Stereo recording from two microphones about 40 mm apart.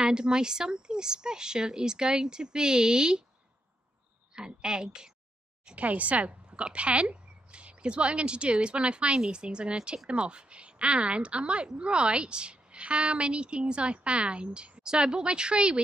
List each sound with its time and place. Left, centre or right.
0.0 s speech: right
4.4 s speech: right
5.8 s speech: right